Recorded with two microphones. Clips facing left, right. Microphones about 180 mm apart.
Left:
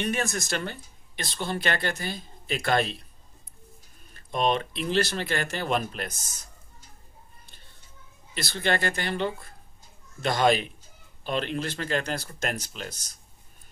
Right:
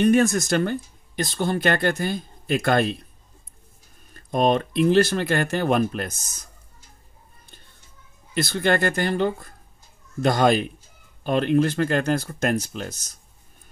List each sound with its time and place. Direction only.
0.0 s speech: 45° right (ahead or behind)
4.1 s speech: 45° right (ahead or behind)
8.4 s speech: 50° right (ahead or behind)